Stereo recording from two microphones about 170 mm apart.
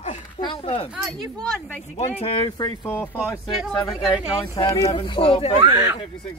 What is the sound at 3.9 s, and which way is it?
Speech, centre (ahead or behind).